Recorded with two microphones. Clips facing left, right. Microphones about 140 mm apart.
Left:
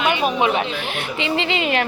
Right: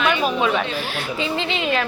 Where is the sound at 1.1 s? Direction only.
90° left.